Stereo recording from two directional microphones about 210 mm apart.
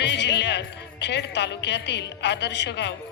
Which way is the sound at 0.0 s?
55° left (ahead or behind).